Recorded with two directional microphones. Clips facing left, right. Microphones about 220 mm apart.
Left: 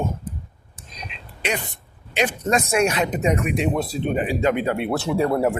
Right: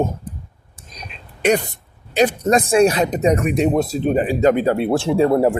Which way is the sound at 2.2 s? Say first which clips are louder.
Right 6 dB; 35° right (ahead or behind).